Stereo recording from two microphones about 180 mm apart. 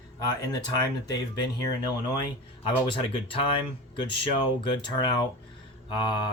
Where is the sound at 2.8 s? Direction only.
25° left (ahead or behind).